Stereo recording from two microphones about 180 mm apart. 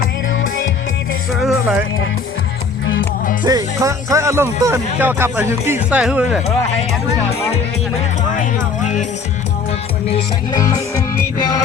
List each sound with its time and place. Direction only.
1.4 s music: centre (ahead or behind)
3.4 s speech: 20° right (ahead or behind)
7.3 s speech: 35° left (ahead or behind)
10.6 s music: 20° left (ahead or behind)